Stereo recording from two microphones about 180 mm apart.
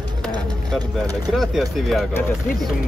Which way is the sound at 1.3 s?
Centre (ahead or behind).